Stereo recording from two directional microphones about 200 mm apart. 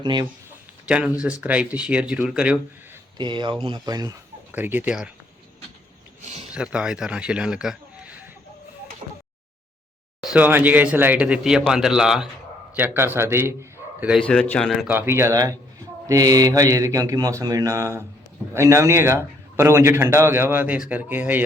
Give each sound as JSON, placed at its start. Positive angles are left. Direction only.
{"t": 0.0, "sound": "speech", "side_deg": -20}
{"t": 0.9, "sound": "speech", "side_deg": -5}
{"t": 3.2, "sound": "speech", "side_deg": -25}
{"t": 6.5, "sound": "speech", "side_deg": -5}
{"t": 10.3, "sound": "a man's voice", "side_deg": -10}
{"t": 14.2, "sound": "speech", "side_deg": 5}
{"t": 14.8, "sound": "a man's voice", "side_deg": -10}